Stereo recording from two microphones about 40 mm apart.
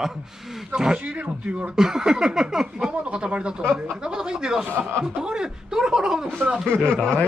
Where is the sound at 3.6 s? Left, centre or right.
Centre.